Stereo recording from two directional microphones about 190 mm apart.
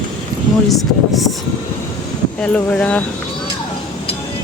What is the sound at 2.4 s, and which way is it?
Speech, 5° left (ahead or behind).